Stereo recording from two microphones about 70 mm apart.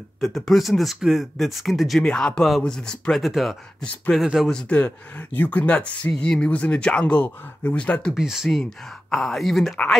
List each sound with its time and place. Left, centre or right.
0.2 s speech: centre
2.0 s speech: centre
4.5 s speech: centre
8.1 s speech: centre